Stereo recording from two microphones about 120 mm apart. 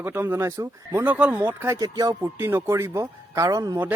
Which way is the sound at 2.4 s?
20° right (ahead or behind).